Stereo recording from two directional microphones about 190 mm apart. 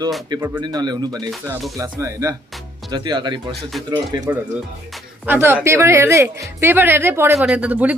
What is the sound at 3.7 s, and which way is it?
Speech, centre (ahead or behind).